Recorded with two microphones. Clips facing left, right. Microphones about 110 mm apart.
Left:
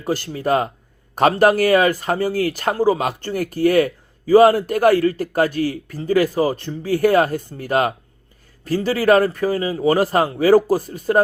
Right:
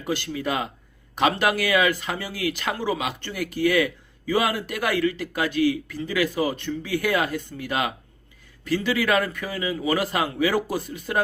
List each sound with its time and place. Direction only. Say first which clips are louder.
0.0 s speech: left 5 dB; 40° left (ahead or behind)